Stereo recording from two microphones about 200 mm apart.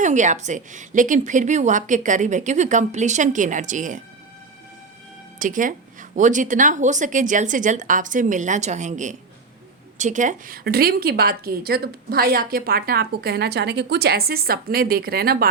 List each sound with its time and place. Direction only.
0.0 s a woman's voice: 40° right (ahead or behind)
5.4 s a woman's voice: 40° right (ahead or behind)